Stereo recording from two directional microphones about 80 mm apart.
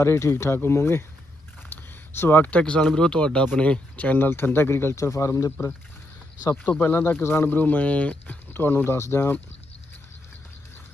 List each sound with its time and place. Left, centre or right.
0.0 s speech: left
6.5 s speech: centre
6.8 s speech: left